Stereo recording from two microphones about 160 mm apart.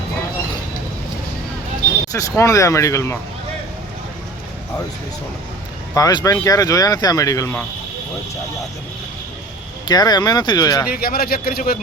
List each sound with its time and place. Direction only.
2.1 s speech: 20° left (ahead or behind)
5.9 s speech: 25° left (ahead or behind)
9.9 s speech: 25° left (ahead or behind)
10.9 s a man's voice: 70° left (ahead or behind)